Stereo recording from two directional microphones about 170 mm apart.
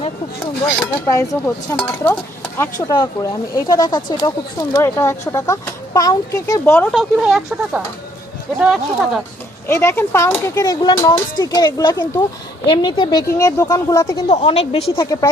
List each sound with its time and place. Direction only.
0.8 s speech: 20° left (ahead or behind)
2.8 s speech: 25° left (ahead or behind)
6.9 s speech: centre (ahead or behind)
9.6 s speech: 15° left (ahead or behind)
14.3 s a woman's voice: 40° left (ahead or behind)
14.9 s speech: 20° left (ahead or behind)